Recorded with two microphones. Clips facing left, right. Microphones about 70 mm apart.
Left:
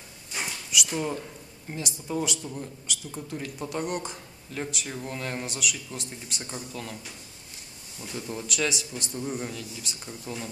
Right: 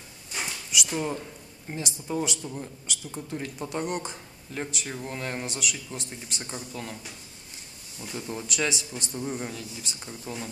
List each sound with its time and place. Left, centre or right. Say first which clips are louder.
0.3 s a sound: left 1 dB; centre
2.0 s a man's voice: even; centre
4.5 s a man's voice: even; centre
5.5 s a man's voice: even; centre
6.4 s a man's voice: even; centre